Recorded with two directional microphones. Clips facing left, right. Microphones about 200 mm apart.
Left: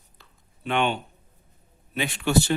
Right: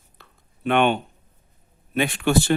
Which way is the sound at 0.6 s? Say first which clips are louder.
Right 5 dB; 55° right (ahead or behind).